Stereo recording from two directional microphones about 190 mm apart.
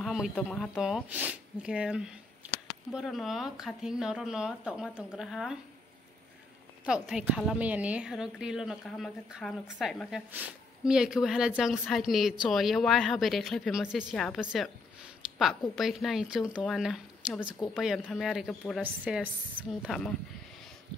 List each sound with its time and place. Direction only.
0.0 s speech: 5° right (ahead or behind)
6.9 s speech: 5° right (ahead or behind)
15.7 s speech: centre (ahead or behind)